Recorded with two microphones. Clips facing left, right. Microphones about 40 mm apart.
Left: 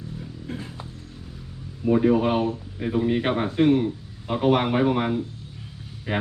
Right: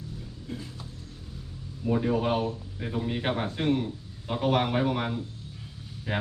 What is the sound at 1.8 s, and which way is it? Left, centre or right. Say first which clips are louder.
Speech: left 7 dB; centre.